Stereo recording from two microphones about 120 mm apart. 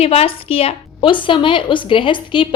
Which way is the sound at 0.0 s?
55° left (ahead or behind).